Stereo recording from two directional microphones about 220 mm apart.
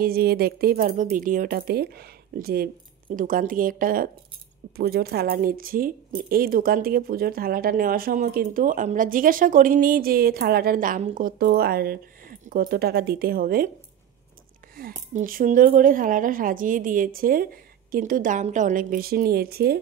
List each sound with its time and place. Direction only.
0.0 s a woman's voice: 45° right (ahead or behind)
14.8 s a woman's voice: 40° right (ahead or behind)